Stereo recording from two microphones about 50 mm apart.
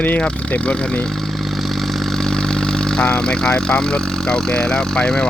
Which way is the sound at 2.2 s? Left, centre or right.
Centre.